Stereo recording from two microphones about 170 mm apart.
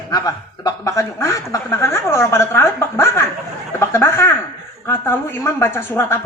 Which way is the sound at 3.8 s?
15° left (ahead or behind).